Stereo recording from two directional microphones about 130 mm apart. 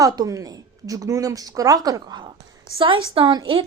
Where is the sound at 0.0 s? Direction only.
25° right (ahead or behind).